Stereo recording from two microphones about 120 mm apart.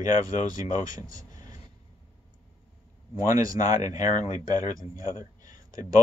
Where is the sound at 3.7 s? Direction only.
80° left.